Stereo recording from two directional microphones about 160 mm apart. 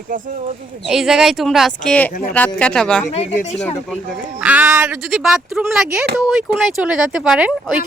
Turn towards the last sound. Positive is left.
turn(degrees=-5)  # may be behind; listen again after turning